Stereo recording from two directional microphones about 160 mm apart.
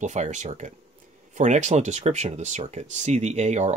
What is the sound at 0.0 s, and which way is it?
Speech, 50° right (ahead or behind).